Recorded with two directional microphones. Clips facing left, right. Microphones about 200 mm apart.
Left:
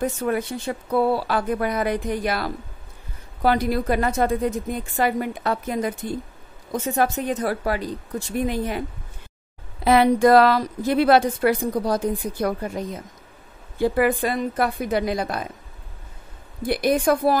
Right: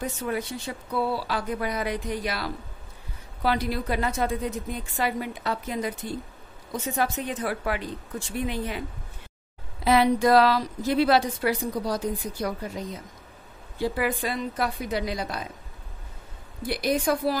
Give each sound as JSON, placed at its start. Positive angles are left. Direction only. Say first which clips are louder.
{"t": 0.0, "sound": "a woman's voice", "louder": "left 6 dB", "side_deg": 50}
{"t": 9.8, "sound": "a woman's voice", "louder": "left 4 dB", "side_deg": 55}
{"t": 16.6, "sound": "a woman's voice", "louder": "left 5 dB", "side_deg": 55}